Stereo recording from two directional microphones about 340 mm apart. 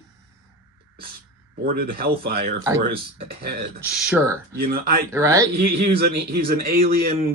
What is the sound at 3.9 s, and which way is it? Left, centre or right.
Speech, centre.